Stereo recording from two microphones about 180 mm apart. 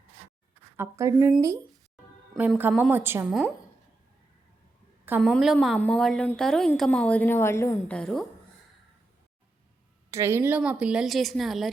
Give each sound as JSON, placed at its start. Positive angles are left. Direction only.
{"t": 0.8, "sound": "a woman's voice", "side_deg": -15}
{"t": 5.0, "sound": "a woman's voice", "side_deg": -10}
{"t": 7.9, "sound": "a woman's voice", "side_deg": 0}
{"t": 10.1, "sound": "a woman's voice", "side_deg": -15}